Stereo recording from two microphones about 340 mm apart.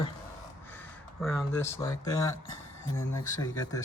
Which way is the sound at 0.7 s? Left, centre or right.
Centre.